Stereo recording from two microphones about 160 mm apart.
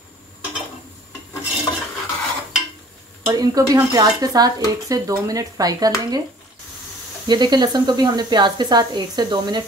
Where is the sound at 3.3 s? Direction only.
25° right (ahead or behind).